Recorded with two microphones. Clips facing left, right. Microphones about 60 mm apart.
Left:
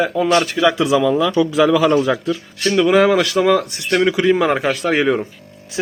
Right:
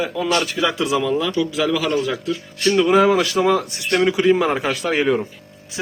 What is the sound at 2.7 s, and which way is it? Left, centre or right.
Speech, left.